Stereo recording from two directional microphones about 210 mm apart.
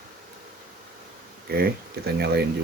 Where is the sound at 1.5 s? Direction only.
50° right (ahead or behind).